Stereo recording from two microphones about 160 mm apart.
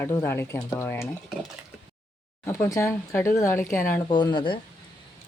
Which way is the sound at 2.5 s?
20° left (ahead or behind).